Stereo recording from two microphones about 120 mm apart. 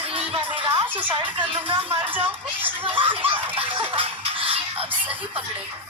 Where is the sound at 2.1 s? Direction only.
15° right (ahead or behind).